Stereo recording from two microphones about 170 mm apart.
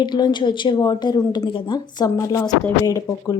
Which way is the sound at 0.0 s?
25° left (ahead or behind).